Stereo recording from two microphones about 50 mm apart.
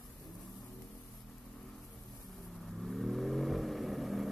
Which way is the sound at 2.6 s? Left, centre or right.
Centre.